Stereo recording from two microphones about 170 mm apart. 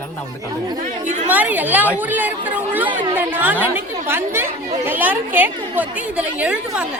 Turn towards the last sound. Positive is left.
turn(degrees=-5)  # may be behind; listen again after turning